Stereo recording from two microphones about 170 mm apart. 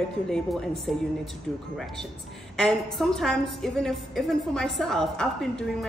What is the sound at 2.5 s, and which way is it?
A woman's voice, 5° left (ahead or behind).